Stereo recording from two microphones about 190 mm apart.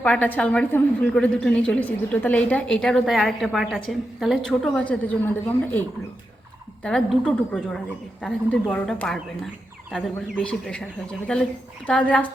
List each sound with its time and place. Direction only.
0.0 s a woman's voice: 5° left (ahead or behind)
6.8 s a woman's voice: 5° left (ahead or behind)